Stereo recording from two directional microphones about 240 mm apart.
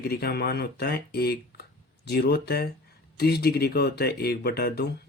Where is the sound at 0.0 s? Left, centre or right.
Left.